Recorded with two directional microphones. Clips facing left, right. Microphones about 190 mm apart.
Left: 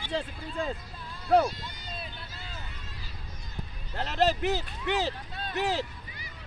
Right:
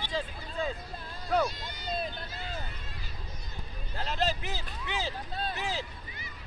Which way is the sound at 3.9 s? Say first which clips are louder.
Left 5 dB; 65° left (ahead or behind).